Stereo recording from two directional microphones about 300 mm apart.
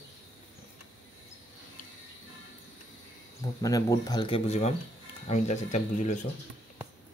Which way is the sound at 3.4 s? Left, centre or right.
Centre.